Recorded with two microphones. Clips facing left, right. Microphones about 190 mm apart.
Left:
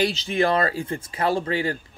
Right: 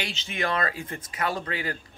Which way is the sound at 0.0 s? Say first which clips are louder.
Left 9 dB; 35° left (ahead or behind).